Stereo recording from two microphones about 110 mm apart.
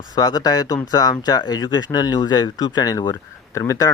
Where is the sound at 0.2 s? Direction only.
35° left (ahead or behind).